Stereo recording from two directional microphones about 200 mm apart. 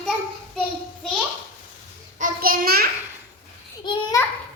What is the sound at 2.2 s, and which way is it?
Child singing, 45° right (ahead or behind).